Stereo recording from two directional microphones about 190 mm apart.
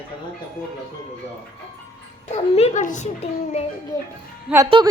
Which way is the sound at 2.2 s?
35° left (ahead or behind).